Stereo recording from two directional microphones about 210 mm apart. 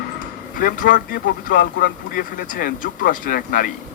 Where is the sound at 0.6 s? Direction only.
40° left (ahead or behind).